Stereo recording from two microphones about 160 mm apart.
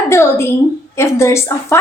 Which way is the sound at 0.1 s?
15° left (ahead or behind).